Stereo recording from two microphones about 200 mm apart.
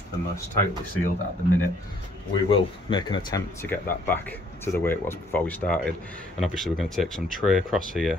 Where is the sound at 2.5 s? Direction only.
25° left (ahead or behind).